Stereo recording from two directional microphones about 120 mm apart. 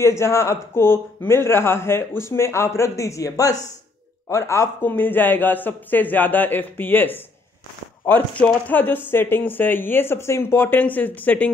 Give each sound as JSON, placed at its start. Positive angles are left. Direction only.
{"t": 0.0, "sound": "a man's voice", "side_deg": 25}